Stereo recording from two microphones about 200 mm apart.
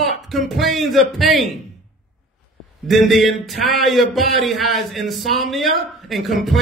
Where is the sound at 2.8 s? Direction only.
Centre (ahead or behind).